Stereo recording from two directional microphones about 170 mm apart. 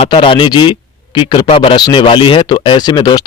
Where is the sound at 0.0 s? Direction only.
30° left (ahead or behind).